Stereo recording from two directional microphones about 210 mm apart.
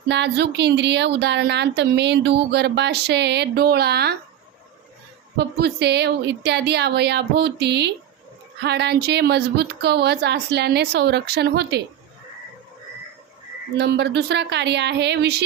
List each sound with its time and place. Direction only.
0.1 s speech: 55° right (ahead or behind)
5.4 s speech: 50° right (ahead or behind)
13.7 s speech: 55° right (ahead or behind)